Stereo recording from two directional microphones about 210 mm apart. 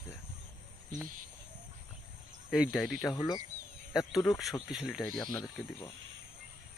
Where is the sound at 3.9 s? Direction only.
Centre (ahead or behind).